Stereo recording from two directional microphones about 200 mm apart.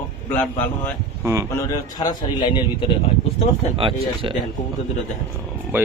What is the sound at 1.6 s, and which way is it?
Speech, 20° left (ahead or behind).